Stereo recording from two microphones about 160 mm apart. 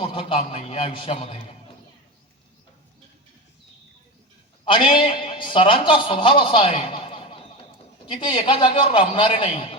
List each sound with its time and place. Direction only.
0.0 s a man's voice: 35° left (ahead or behind)
4.6 s a man's voice: 30° left (ahead or behind)